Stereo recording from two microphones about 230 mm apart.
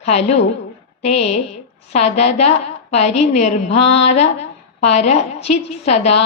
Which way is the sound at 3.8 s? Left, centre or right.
Left.